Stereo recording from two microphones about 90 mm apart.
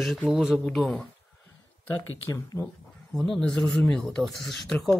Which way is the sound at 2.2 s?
35° left (ahead or behind).